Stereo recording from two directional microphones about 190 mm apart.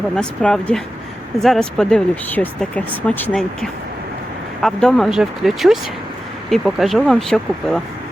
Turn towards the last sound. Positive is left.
turn(degrees=0)  # may be behind; listen again after turning